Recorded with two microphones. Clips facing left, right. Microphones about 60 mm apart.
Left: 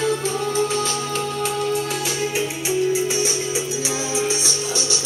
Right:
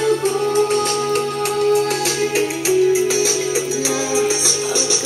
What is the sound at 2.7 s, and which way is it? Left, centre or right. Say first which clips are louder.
Music: right 6 dB; right.